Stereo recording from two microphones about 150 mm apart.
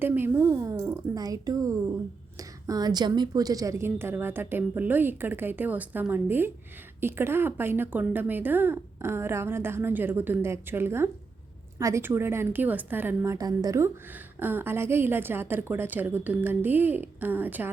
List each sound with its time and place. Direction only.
0.0 s a woman's voice: 15° right (ahead or behind)